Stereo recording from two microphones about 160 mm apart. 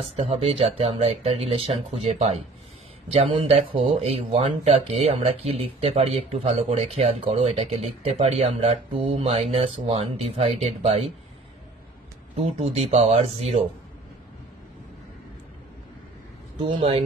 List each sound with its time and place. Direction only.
0.1 s speech: 40° right (ahead or behind)
12.4 s speech: 40° right (ahead or behind)
16.5 s speech: 30° right (ahead or behind)